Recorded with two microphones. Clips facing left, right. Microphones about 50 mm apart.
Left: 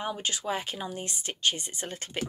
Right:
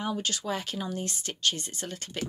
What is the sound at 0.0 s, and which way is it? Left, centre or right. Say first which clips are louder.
Speech: right 1 dB; left.